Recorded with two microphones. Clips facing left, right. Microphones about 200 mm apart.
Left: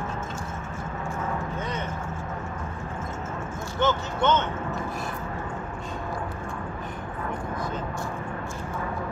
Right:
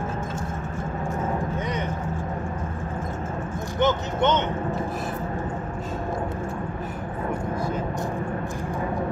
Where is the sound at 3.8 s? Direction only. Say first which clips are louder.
Right 2 dB; 20° right (ahead or behind).